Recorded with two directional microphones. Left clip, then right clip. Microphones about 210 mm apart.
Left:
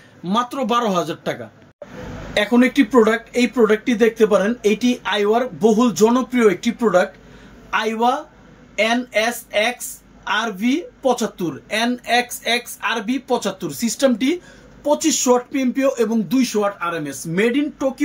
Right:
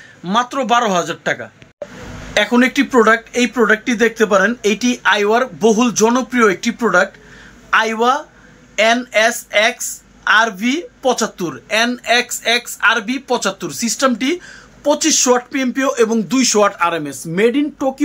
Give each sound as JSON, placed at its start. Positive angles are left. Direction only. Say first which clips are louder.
{"t": 0.3, "sound": "a woman's voice", "louder": "right 5 dB", "side_deg": 0}
{"t": 16.5, "sound": "speech", "louder": "right 10 dB", "side_deg": -30}
{"t": 16.9, "sound": "speech", "louder": "right 3 dB", "side_deg": -5}